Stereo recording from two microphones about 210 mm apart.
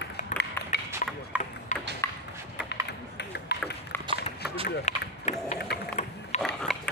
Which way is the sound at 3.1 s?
50° left (ahead or behind).